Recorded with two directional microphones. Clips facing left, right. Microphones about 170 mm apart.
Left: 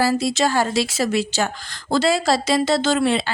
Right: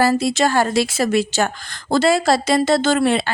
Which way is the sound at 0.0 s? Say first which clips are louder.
Right 2 dB; 55° right (ahead or behind).